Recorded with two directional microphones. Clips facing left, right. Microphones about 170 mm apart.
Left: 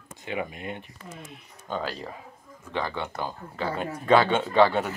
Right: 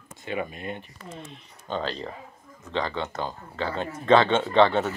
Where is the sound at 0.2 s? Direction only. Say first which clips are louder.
Right 1 dB; 15° left (ahead or behind).